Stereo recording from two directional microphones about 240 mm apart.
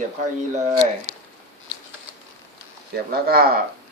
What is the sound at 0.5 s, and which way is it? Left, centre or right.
Speech, right.